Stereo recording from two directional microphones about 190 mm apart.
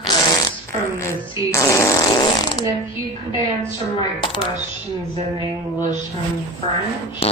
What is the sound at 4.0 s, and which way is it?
Speech, 25° left (ahead or behind).